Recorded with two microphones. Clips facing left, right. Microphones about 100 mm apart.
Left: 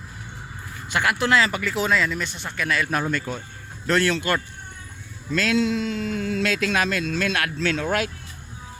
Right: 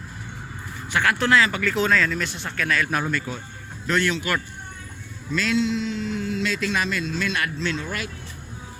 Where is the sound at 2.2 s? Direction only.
Centre (ahead or behind).